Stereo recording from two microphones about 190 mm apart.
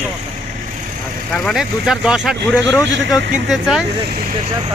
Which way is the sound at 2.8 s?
75° right (ahead or behind).